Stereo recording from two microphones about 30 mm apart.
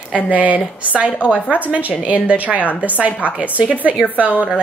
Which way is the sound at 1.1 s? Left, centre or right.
Left.